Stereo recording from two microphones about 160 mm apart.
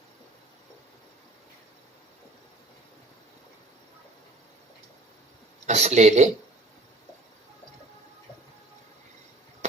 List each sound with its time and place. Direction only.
5.6 s speech: 45° right (ahead or behind)